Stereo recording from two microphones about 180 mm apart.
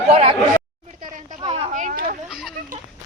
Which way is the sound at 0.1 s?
30° right (ahead or behind).